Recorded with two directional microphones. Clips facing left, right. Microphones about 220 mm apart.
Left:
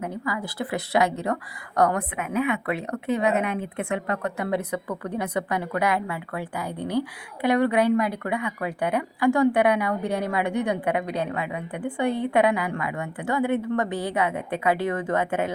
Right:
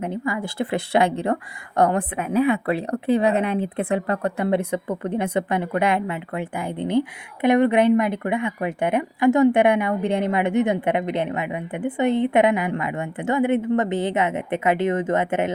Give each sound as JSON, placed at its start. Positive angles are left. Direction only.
{"t": 0.0, "sound": "speech", "side_deg": -25}